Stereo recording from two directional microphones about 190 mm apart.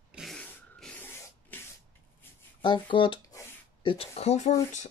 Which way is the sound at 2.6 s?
25° left (ahead or behind).